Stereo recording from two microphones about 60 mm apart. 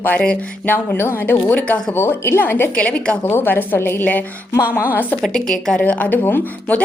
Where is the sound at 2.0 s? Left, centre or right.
Left.